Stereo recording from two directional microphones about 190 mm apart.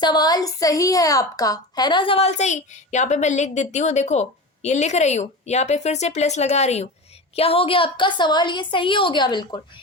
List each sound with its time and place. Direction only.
0.0 s a woman's voice: 20° left (ahead or behind)